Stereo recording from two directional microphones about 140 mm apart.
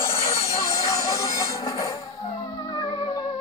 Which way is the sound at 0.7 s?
25° left (ahead or behind).